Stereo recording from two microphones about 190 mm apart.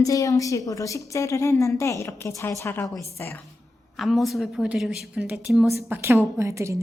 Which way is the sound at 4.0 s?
Centre (ahead or behind).